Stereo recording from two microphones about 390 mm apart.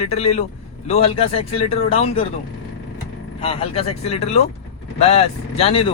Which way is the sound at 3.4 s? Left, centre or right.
Centre.